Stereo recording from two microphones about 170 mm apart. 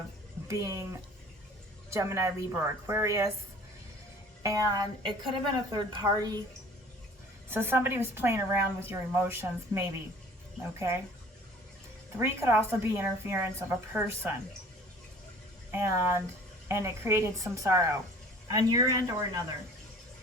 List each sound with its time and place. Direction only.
0.4 s speech: 20° right (ahead or behind)
1.9 s a woman's voice: 15° right (ahead or behind)
4.4 s a woman's voice: 20° right (ahead or behind)
7.5 s a woman's voice: 15° right (ahead or behind)
12.1 s a woman's voice: 15° right (ahead or behind)
15.7 s a woman's voice: 15° right (ahead or behind)